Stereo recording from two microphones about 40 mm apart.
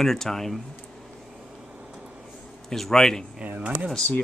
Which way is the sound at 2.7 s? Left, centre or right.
Centre.